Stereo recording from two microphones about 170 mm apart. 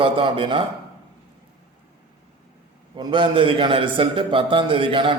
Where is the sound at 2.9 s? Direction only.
30° right (ahead or behind).